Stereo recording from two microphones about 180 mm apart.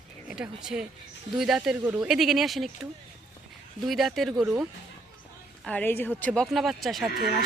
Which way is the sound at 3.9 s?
Centre (ahead or behind).